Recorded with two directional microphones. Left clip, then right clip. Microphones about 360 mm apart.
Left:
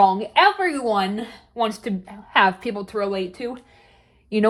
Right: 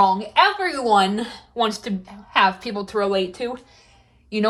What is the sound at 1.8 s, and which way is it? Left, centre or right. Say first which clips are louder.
Speech: left 1 dB; left.